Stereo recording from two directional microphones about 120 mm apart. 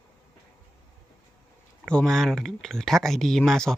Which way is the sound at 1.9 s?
5° left (ahead or behind).